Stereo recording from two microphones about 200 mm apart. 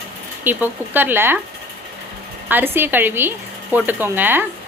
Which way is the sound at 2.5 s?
10° right (ahead or behind).